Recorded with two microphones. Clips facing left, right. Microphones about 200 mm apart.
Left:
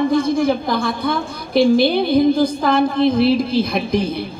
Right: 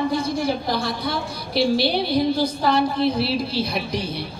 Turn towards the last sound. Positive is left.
turn(degrees=50)  # may be behind; listen again after turning